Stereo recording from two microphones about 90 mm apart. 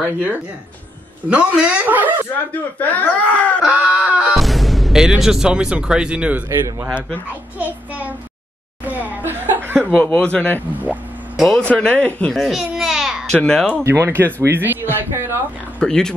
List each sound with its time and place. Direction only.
1.3 s speech: 10° right (ahead or behind)
2.5 s speech: 20° left (ahead or behind)
3.6 s a sound: 15° right (ahead or behind)
4.4 s speech: centre (ahead or behind)
7.5 s child singing: 15° right (ahead or behind)
8.8 s chuckle: 20° right (ahead or behind)
9.8 s speech: 10° left (ahead or behind)
11.3 s speech: centre (ahead or behind)
11.7 s speech: 15° left (ahead or behind)
12.4 s babbling: centre (ahead or behind)
13.3 s speech: 5° left (ahead or behind)
13.8 s speech: 30° right (ahead or behind)
15.8 s speech: 5° left (ahead or behind)